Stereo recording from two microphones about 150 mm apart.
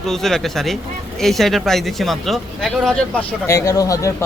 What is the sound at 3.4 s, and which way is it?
Speech, 20° left (ahead or behind).